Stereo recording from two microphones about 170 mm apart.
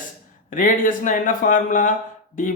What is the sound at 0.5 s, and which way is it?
Speech, 50° left (ahead or behind).